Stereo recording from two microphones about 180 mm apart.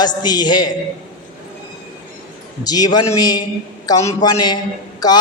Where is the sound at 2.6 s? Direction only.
20° left (ahead or behind).